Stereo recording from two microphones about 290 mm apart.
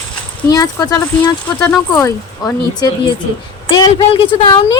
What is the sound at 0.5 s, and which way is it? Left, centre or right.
Speech, centre.